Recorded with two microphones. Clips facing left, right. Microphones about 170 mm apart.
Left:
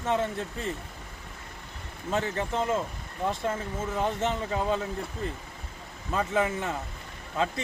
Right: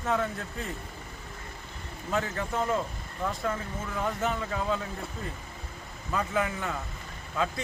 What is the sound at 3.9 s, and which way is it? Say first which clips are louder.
Speech: left 1 dB; 25° left (ahead or behind).